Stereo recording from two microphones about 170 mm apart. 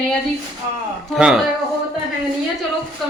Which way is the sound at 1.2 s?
5° right (ahead or behind).